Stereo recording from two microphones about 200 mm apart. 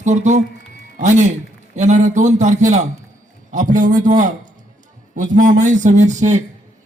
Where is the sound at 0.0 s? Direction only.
35° right (ahead or behind).